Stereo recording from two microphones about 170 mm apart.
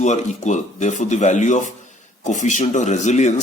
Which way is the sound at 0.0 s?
45° left (ahead or behind).